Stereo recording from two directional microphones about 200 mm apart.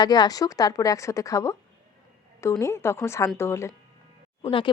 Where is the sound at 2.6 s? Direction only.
15° left (ahead or behind).